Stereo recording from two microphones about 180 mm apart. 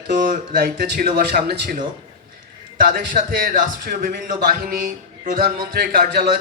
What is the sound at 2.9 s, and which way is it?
A man's voice, 55° right (ahead or behind).